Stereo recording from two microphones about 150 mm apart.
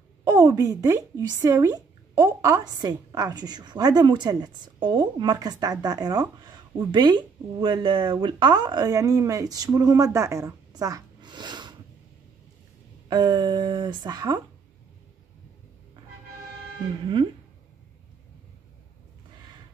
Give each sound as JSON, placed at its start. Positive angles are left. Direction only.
{"t": 0.3, "sound": "speech", "side_deg": -20}
{"t": 13.1, "sound": "speech", "side_deg": -30}